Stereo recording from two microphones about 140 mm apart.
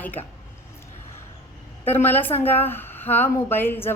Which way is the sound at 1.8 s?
15° left (ahead or behind).